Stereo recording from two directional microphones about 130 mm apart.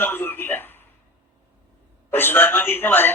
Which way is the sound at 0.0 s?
15° left (ahead or behind).